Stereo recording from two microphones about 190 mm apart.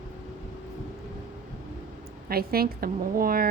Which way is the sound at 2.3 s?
50° right (ahead or behind).